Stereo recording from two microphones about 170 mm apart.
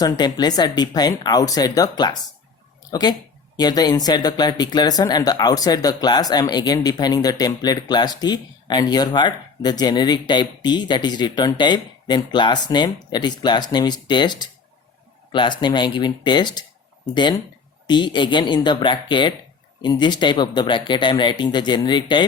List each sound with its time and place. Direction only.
0.0 s speech: 25° left (ahead or behind)
17.8 s speech: 25° left (ahead or behind)